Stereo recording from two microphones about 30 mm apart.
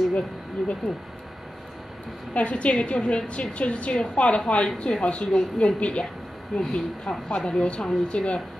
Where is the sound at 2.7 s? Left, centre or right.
Left.